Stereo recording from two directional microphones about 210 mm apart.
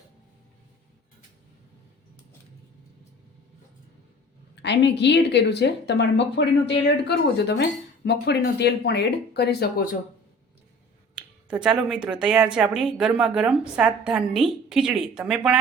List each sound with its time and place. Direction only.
4.5 s a woman's voice: 55° left (ahead or behind)
11.1 s a sound: 5° right (ahead or behind)
12.2 s a woman's voice: 5° right (ahead or behind)